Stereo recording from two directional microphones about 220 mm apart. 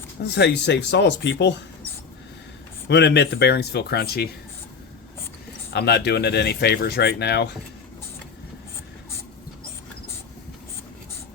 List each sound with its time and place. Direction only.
0.3 s speech: 50° left (ahead or behind)
2.9 s speech: 50° left (ahead or behind)
5.7 s speech: 50° left (ahead or behind)